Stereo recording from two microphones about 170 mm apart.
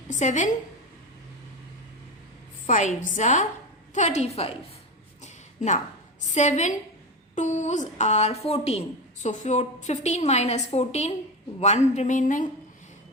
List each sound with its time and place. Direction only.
0.1 s speech: 45° left (ahead or behind)
2.6 s a woman's voice: 50° left (ahead or behind)
5.2 s a sound: 45° left (ahead or behind)
6.3 s a woman's voice: 45° left (ahead or behind)